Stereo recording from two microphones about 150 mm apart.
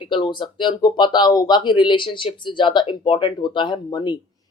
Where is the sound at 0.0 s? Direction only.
30° left (ahead or behind).